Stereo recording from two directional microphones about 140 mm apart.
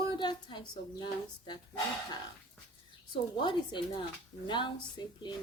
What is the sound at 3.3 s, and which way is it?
A woman's voice, 35° left (ahead or behind).